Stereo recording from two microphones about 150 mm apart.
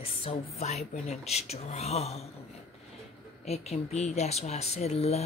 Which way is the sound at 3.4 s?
45° left (ahead or behind).